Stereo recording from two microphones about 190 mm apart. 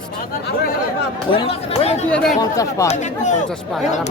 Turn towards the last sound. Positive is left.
turn(degrees=40)  # may be behind; listen again after turning